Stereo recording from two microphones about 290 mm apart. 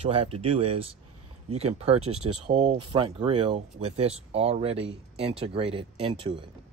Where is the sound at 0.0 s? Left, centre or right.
Centre.